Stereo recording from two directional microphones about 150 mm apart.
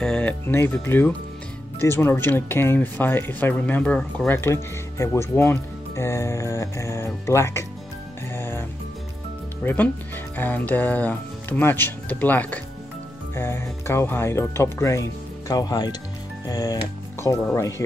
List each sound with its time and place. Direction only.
0.0 s speech: 5° left (ahead or behind)
8.3 s music: 15° left (ahead or behind)
9.7 s speech: 15° left (ahead or behind)